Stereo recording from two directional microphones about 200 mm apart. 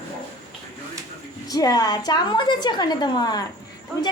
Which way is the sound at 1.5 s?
20° left (ahead or behind).